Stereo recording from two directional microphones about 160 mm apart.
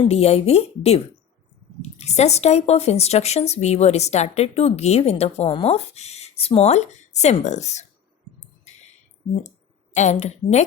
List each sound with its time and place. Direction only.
0.1 s a woman's voice: 40° left (ahead or behind)
9.9 s speech: 45° left (ahead or behind)